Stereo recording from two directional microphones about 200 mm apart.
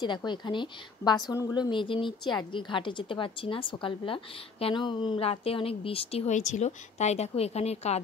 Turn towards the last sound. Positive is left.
turn(degrees=30)  # may be behind; listen again after turning